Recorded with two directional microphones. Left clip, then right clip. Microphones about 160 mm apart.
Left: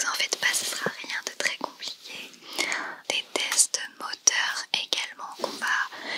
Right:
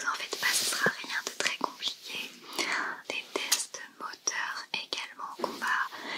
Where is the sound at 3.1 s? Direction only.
30° left (ahead or behind).